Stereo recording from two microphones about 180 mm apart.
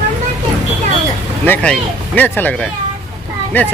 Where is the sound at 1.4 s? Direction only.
10° left (ahead or behind).